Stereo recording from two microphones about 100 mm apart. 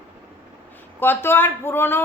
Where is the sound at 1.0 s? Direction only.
20° left (ahead or behind).